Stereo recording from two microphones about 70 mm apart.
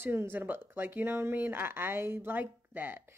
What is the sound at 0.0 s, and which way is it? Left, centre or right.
Speech, right.